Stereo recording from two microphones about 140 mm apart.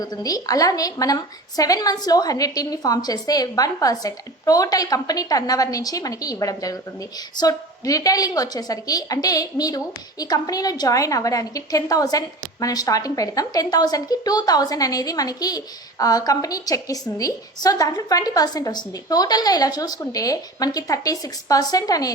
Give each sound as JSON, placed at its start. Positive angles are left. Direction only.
{"t": 0.0, "sound": "a woman's voice", "side_deg": 25}